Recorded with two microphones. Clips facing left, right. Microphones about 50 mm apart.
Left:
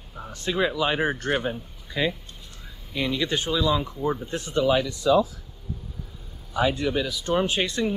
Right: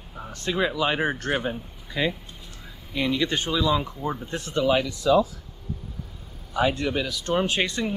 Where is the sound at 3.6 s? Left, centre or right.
Centre.